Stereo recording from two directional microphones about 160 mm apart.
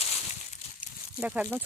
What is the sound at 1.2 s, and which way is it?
Speech, 10° right (ahead or behind).